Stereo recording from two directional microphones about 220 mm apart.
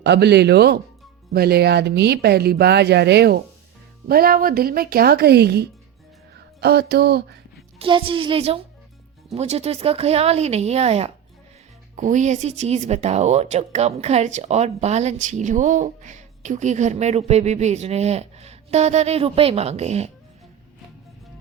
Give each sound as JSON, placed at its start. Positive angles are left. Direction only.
{"t": 0.0, "sound": "speech", "side_deg": -50}
{"t": 7.8, "sound": "speech", "side_deg": -25}